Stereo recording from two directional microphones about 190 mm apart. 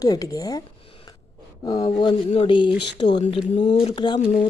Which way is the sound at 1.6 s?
20° left (ahead or behind).